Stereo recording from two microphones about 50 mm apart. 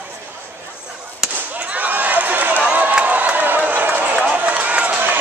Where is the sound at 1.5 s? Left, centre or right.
Right.